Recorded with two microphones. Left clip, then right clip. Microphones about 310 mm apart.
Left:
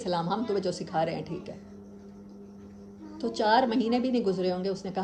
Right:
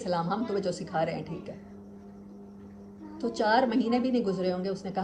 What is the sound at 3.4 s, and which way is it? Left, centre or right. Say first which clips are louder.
A woman's voice: left 1 dB; left.